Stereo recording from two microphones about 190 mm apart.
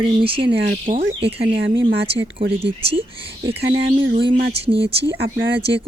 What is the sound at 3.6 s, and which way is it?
Speech, 65° right (ahead or behind).